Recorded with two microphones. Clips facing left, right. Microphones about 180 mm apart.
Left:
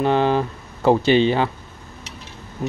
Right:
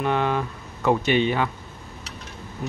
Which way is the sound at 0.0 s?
30° left (ahead or behind).